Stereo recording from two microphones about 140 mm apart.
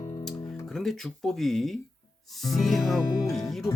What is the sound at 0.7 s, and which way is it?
Speech, centre (ahead or behind).